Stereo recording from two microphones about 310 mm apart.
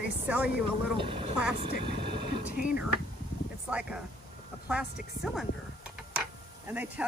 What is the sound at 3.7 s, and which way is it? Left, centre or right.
Speech, centre.